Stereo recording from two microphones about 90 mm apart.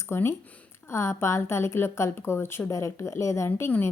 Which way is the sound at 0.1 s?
30° left (ahead or behind).